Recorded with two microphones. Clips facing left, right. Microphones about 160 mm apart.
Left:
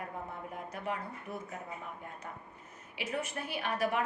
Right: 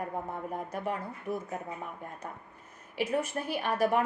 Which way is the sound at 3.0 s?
40° right (ahead or behind).